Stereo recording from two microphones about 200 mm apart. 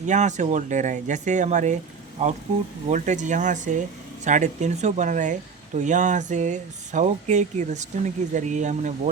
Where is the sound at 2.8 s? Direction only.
35° right (ahead or behind).